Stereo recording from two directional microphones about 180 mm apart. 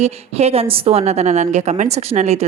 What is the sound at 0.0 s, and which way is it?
A woman's voice, 35° right (ahead or behind).